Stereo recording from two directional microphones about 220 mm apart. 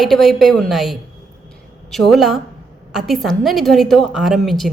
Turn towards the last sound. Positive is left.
turn(degrees=0)  # may be behind; listen again after turning